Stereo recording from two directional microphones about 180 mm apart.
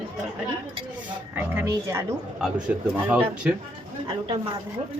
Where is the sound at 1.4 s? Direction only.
10° right (ahead or behind).